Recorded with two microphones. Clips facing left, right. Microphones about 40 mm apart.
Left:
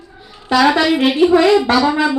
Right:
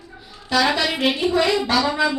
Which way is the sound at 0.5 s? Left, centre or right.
Left.